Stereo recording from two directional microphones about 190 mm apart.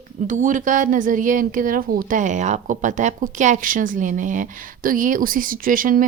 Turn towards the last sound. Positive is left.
turn(degrees=-45)  # may be behind; listen again after turning